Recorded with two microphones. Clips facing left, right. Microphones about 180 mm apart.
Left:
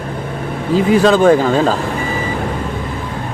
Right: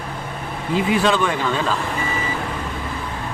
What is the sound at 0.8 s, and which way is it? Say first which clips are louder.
Speech: left 10 dB; 40° left (ahead or behind).